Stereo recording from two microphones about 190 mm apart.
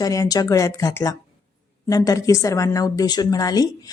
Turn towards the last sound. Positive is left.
turn(degrees=20)  # may be behind; listen again after turning